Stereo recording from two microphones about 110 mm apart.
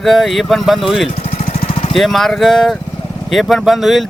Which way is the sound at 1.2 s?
65° left (ahead or behind).